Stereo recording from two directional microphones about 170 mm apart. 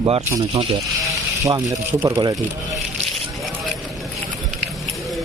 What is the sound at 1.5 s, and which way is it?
Speech, 20° right (ahead or behind).